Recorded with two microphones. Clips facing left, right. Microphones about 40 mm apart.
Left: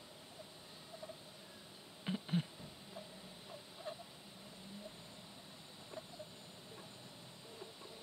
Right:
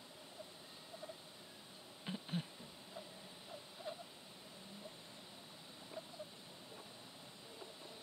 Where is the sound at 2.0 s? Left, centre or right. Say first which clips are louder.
Left 5 dB; centre.